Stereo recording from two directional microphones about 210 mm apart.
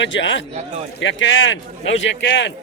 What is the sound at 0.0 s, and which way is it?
A man's voice, 60° left (ahead or behind).